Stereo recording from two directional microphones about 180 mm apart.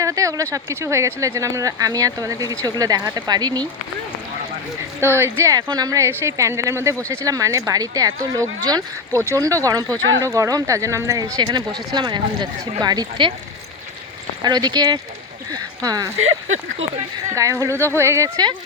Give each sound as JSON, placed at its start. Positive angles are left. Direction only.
{"t": 0.0, "sound": "a sound", "side_deg": -15}
{"t": 0.5, "sound": "speech", "side_deg": -15}
{"t": 4.9, "sound": "speech", "side_deg": -15}
{"t": 14.4, "sound": "speech", "side_deg": -25}
{"t": 17.3, "sound": "speech", "side_deg": -15}